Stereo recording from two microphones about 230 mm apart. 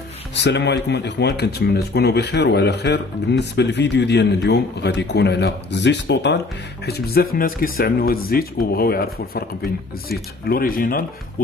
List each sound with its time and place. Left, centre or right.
0.3 s speech: left